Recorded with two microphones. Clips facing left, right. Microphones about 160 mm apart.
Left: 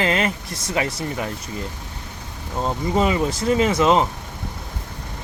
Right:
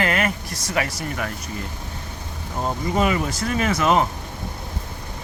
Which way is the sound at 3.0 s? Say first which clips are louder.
Left 2 dB; 25° left (ahead or behind).